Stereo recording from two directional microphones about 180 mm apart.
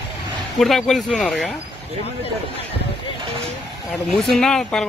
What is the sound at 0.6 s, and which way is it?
Speech, centre (ahead or behind).